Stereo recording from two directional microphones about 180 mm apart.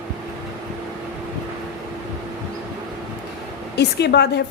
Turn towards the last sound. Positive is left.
turn(degrees=70)  # may be behind; listen again after turning